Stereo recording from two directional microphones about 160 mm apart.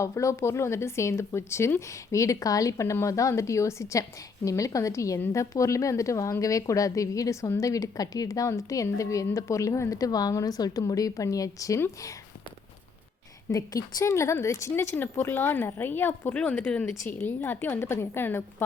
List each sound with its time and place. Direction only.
0.0 s a woman's voice: 20° left (ahead or behind)
13.5 s a woman's voice: 20° left (ahead or behind)